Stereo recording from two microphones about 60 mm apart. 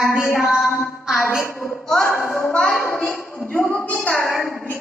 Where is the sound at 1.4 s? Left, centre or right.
Left.